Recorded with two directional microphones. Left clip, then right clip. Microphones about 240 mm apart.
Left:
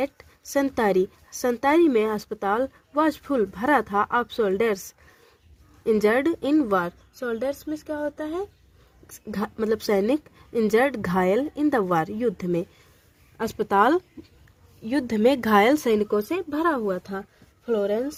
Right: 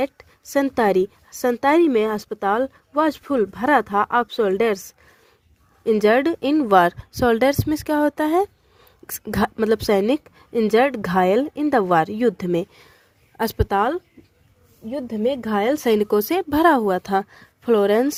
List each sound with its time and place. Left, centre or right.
0.5 s a woman's voice: centre
5.8 s a woman's voice: centre
6.7 s speech: right
9.0 s a woman's voice: right
13.7 s speech: centre
14.8 s speech: centre; by 18.1 s right